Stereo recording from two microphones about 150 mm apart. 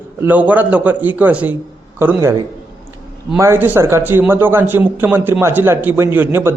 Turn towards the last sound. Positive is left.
turn(degrees=-15)  # may be behind; listen again after turning